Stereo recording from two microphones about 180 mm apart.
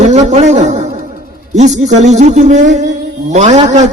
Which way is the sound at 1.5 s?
40° right (ahead or behind).